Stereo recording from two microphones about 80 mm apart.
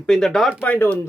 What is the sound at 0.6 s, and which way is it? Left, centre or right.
Speech, left.